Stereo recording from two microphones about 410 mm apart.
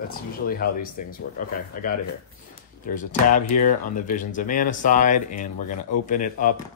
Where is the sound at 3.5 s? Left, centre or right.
Centre.